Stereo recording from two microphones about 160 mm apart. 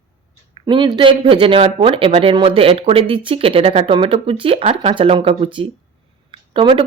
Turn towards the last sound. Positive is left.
turn(degrees=-30)  # may be behind; listen again after turning